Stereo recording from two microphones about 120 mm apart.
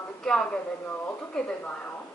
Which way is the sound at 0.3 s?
5° left (ahead or behind).